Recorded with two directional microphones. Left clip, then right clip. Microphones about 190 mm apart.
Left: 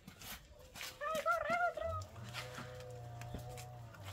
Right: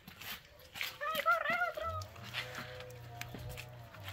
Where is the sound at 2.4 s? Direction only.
10° left (ahead or behind).